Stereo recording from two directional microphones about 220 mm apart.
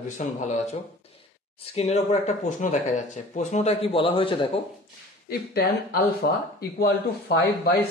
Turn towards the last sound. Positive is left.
turn(degrees=45)  # may be behind; listen again after turning